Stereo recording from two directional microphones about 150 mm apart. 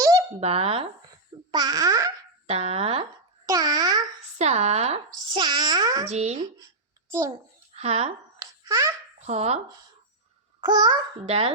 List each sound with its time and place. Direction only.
0.3 s a child's voice: 40° right (ahead or behind)
1.0 s speech: 25° right (ahead or behind)
2.5 s a child's voice: 45° right (ahead or behind)
3.4 s babbling: 25° right (ahead or behind)
4.4 s a child's voice: 50° right (ahead or behind); by 6.1 s 25° right (ahead or behind)
6.1 s speech: 50° right (ahead or behind)
7.1 s a child's voice: 20° right (ahead or behind)
7.8 s speech: 45° right (ahead or behind)
8.4 s babbling: 20° right (ahead or behind)
9.2 s speech: 45° right (ahead or behind)
10.6 s babbling: 25° right (ahead or behind)
11.3 s a child's voice: 40° right (ahead or behind)